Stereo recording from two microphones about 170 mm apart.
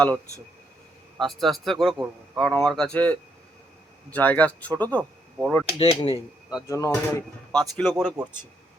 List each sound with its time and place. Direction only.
1.2 s speech: centre (ahead or behind)
5.8 s speech: 35° left (ahead or behind)
6.7 s speech: 15° left (ahead or behind)
7.5 s speech: 5° left (ahead or behind)
8.2 s speech: 5° right (ahead or behind)